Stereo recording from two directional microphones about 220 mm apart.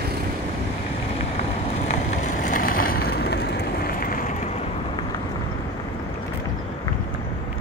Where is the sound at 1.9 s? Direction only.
35° left (ahead or behind).